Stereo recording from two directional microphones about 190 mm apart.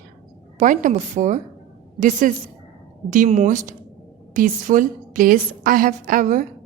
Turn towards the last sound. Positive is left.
turn(degrees=-45)  # may be behind; listen again after turning